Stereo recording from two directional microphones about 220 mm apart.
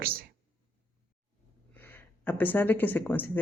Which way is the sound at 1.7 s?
10° left (ahead or behind).